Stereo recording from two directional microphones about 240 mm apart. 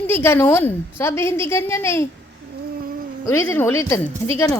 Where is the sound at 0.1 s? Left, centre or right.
Centre.